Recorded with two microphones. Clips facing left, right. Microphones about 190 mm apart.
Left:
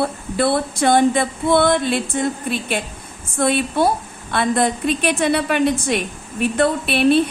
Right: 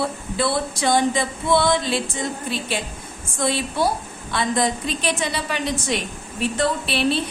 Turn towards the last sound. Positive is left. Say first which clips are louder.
# left 6 dB
turn(degrees=55)  # may be behind; listen again after turning